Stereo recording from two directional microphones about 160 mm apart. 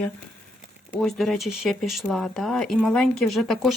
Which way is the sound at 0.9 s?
Centre (ahead or behind).